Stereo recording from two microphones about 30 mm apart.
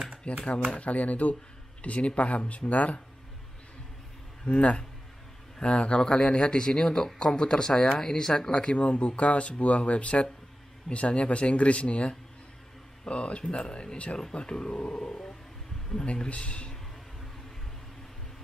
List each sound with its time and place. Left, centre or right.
0.3 s speech: left
4.5 s speech: left; by 8.5 s centre
8.5 s speech: left
8.7 s speech: left
16.1 s speech: left